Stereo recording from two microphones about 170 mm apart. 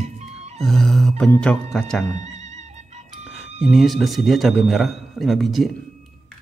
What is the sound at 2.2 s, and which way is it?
Music, 40° right (ahead or behind).